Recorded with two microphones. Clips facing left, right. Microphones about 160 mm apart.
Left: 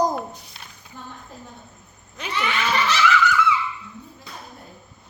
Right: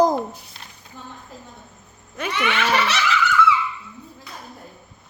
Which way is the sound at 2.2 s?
70° right (ahead or behind).